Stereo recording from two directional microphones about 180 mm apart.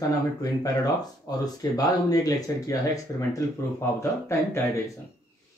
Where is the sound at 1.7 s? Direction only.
20° left (ahead or behind).